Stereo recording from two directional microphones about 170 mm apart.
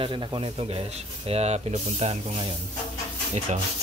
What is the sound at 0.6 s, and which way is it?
Speech, 35° right (ahead or behind).